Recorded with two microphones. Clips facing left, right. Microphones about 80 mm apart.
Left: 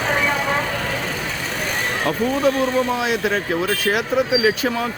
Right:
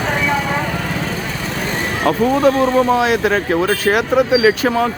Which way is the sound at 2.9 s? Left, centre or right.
Right.